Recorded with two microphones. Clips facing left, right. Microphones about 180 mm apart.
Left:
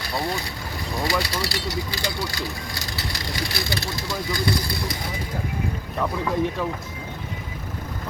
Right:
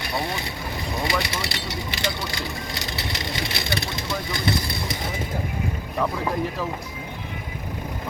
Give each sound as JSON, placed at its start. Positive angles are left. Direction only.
{"t": 0.0, "sound": "speech", "side_deg": -20}
{"t": 6.0, "sound": "speech", "side_deg": 0}